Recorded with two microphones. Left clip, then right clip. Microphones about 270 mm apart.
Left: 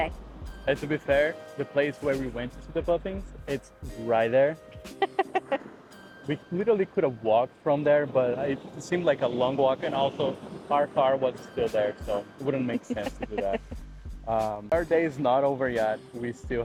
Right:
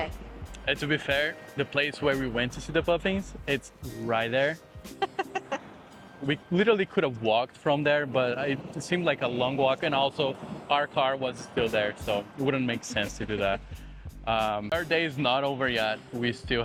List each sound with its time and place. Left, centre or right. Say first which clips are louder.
0.6 s speech: even; right
4.1 s speech: left 4 dB; right
4.9 s chicken: left 4 dB; centre
6.2 s speech: right 2 dB; right
9.6 s speech: even; right
10.7 s speech: left 2 dB; right
15.2 s speech: left 2 dB; right